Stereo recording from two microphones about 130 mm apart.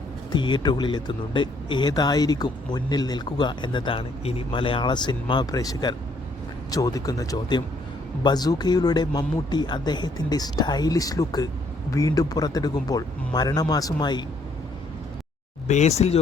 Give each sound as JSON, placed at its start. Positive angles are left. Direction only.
{"t": 0.3, "sound": "a man's voice", "side_deg": 35}
{"t": 15.6, "sound": "speech", "side_deg": 60}